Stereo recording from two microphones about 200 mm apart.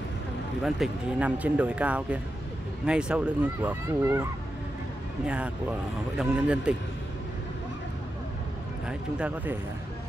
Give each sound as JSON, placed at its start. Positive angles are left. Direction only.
{"t": 0.7, "sound": "speech", "side_deg": -5}
{"t": 8.8, "sound": "speech", "side_deg": -5}